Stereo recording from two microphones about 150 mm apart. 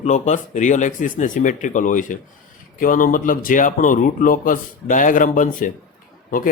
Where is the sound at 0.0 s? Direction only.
50° left (ahead or behind).